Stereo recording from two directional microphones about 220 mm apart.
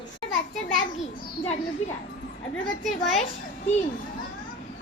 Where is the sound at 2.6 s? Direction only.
Centre (ahead or behind).